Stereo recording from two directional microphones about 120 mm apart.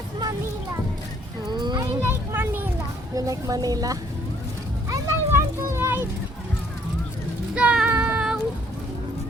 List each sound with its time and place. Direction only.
1.5 s children playing: 40° right (ahead or behind)
2.0 s a sound: 20° right (ahead or behind)
3.2 s speech: 30° right (ahead or behind)
4.9 s children playing: 20° right (ahead or behind)
7.5 s child singing: 10° right (ahead or behind)